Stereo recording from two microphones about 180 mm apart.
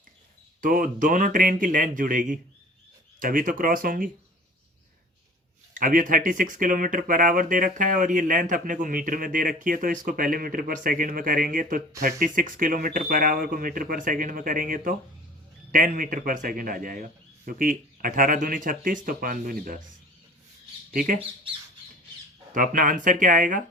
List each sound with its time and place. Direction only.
0.6 s speech: 50° right (ahead or behind)
5.7 s speech: 50° right (ahead or behind)
20.9 s speech: 50° right (ahead or behind)
22.5 s speech: 45° right (ahead or behind)